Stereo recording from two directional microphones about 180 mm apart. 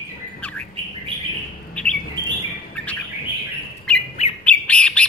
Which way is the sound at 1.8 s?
5° left (ahead or behind).